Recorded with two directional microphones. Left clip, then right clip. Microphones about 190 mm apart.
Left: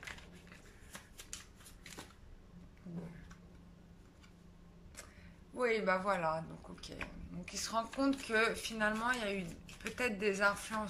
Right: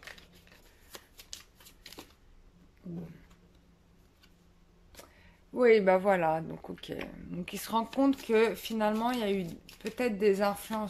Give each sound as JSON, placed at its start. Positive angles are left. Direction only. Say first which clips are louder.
{"t": 1.1, "sound": "shuffling cards", "louder": "right 3 dB", "side_deg": -25}
{"t": 2.8, "sound": "a sound", "louder": "right 6 dB", "side_deg": -20}
{"t": 5.5, "sound": "speech", "louder": "right 10 dB", "side_deg": -35}